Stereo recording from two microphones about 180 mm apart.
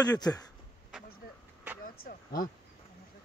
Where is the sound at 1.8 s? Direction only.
55° left (ahead or behind).